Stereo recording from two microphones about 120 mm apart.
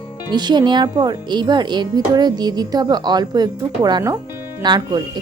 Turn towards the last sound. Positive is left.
turn(degrees=-35)  # may be behind; listen again after turning